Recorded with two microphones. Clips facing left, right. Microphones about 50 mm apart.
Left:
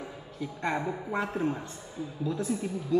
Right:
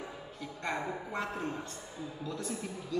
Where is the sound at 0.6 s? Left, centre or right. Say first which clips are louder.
Left 4 dB; centre.